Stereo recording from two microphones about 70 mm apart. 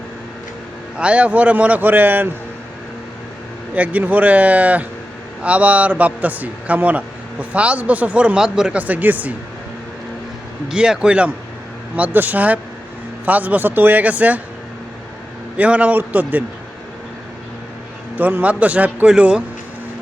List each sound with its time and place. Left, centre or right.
0.9 s a man's voice: centre
3.8 s a man's voice: right
10.7 s a man's voice: centre
15.5 s a man's voice: centre
18.2 s a man's voice: right